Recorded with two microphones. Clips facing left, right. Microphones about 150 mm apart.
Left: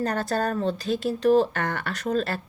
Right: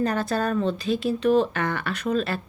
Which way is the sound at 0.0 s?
40° left (ahead or behind).